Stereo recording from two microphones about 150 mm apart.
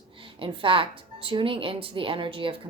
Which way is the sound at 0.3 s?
35° right (ahead or behind).